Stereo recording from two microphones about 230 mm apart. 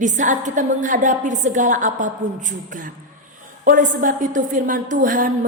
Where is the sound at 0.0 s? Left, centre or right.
Right.